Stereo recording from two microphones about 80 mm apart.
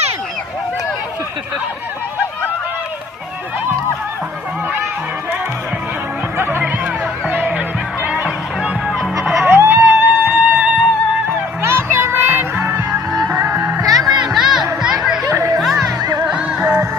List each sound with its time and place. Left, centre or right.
6.3 s music: right
9.4 s music: right
11.2 s music: right
13.8 s music: right
14.2 s music: centre
14.8 s chatter: centre
15.6 s music: centre
16.0 s music: right
16.3 s music: centre